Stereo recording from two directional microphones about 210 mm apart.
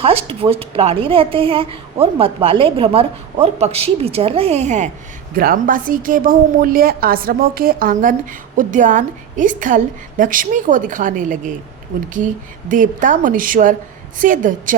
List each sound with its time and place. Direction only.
0.0 s a woman's voice: 25° right (ahead or behind)